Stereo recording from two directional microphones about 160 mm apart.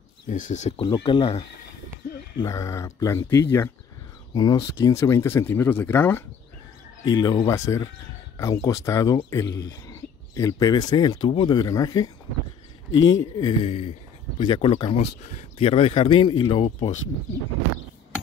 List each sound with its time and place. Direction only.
0.3 s speech: 50° left (ahead or behind)
0.7 s speech: 30° left (ahead or behind)
2.3 s speech: 20° left (ahead or behind)
7.1 s speech: 25° left (ahead or behind)
13.7 s speech: 35° left (ahead or behind)